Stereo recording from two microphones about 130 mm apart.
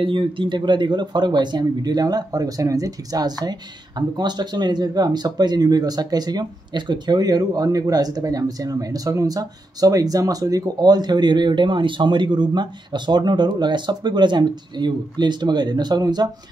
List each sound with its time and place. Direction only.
0.0 s speech: 40° right (ahead or behind)